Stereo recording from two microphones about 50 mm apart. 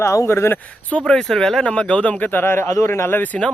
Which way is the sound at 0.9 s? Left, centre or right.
Left.